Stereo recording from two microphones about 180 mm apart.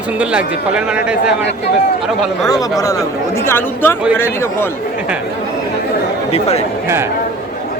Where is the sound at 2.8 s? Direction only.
20° left (ahead or behind).